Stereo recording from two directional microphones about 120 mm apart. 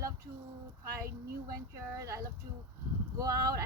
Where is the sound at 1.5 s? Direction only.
25° right (ahead or behind).